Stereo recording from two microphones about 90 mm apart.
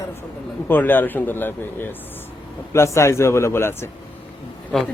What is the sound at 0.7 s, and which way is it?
Speech, 20° left (ahead or behind).